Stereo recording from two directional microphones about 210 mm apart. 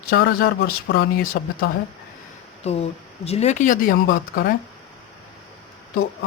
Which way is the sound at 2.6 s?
30° left (ahead or behind).